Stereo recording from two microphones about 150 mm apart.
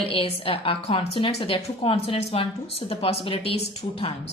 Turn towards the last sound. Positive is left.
turn(degrees=40)  # may be behind; listen again after turning